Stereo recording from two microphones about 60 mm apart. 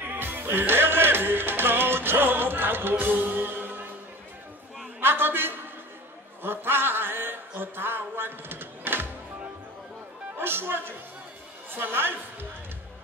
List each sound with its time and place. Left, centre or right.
0.0 s music: right
5.0 s a sound: right
6.4 s music: right
10.3 s a woman's voice: right